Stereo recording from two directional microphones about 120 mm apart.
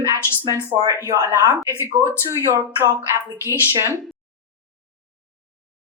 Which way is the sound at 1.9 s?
40° right (ahead or behind).